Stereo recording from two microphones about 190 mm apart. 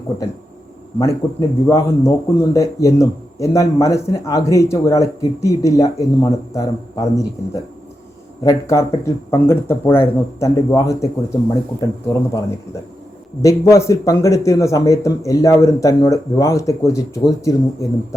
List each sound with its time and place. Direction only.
0.9 s speech: 15° left (ahead or behind)
13.4 s speech: 15° left (ahead or behind)